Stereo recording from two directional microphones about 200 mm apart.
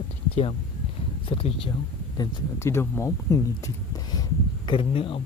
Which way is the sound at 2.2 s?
15° left (ahead or behind).